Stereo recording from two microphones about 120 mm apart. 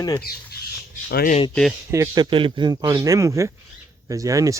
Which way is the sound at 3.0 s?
25° right (ahead or behind).